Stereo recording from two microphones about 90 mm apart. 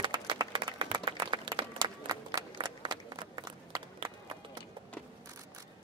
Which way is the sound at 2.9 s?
60° right (ahead or behind).